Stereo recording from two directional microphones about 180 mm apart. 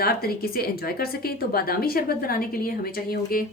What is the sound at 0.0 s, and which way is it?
Speech, 55° left (ahead or behind).